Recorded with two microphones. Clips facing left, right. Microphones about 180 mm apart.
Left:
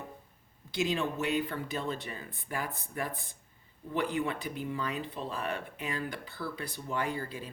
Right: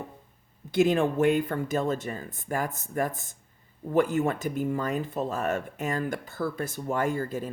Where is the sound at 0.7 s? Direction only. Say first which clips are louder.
Right 9 dB; 50° right (ahead or behind).